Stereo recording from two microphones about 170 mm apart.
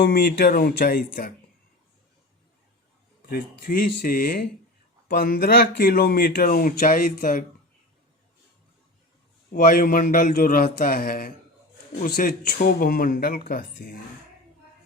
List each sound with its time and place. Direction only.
0.0 s speech: 70° left (ahead or behind)
3.2 s speech: 60° left (ahead or behind)
9.5 s speech: 55° left (ahead or behind)